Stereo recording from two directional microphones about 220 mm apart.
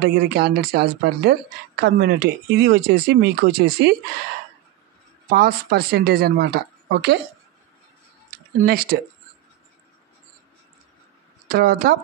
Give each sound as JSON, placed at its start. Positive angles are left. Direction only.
{"t": 0.0, "sound": "speech", "side_deg": -45}
{"t": 5.3, "sound": "speech", "side_deg": -45}
{"t": 8.5, "sound": "speech", "side_deg": -45}
{"t": 11.4, "sound": "speech", "side_deg": -40}